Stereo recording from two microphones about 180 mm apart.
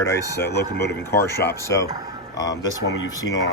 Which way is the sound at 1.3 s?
15° left (ahead or behind).